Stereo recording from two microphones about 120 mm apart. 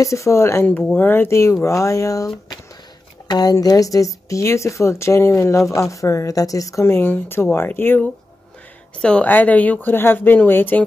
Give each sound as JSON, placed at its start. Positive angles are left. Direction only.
{"t": 0.0, "sound": "a woman's voice", "side_deg": 25}
{"t": 3.3, "sound": "a woman's voice", "side_deg": 35}